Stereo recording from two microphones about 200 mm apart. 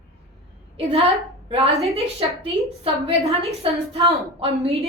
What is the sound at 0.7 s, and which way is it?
Speech, 30° right (ahead or behind).